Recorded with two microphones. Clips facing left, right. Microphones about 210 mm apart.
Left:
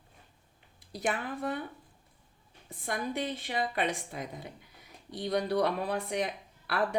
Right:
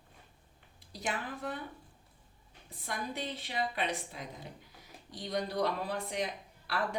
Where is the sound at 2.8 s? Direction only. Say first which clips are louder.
Left 5 dB; 50° left (ahead or behind).